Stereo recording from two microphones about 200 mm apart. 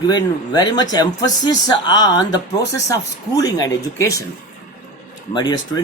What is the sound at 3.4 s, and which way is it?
Speech, 20° left (ahead or behind).